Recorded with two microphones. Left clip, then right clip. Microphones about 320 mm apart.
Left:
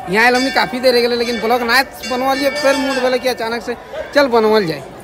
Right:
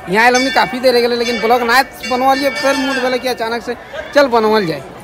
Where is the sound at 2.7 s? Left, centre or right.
Left.